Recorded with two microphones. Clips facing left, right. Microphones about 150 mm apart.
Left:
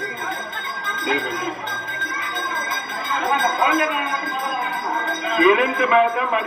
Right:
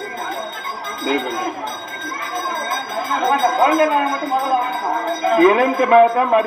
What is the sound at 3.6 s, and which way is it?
Speech, 45° right (ahead or behind).